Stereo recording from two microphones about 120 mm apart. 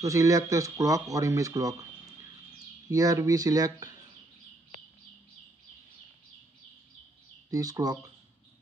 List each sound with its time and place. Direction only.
0.0 s speech: 25° right (ahead or behind)
2.9 s speech: 30° right (ahead or behind)
7.5 s speech: 30° right (ahead or behind)